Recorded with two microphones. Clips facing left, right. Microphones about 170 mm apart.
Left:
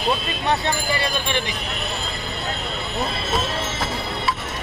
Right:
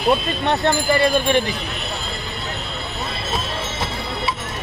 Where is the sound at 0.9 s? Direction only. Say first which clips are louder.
Right 8 dB; 50° right (ahead or behind).